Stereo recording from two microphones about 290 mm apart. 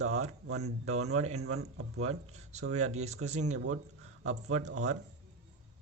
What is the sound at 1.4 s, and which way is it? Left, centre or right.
Speech, right.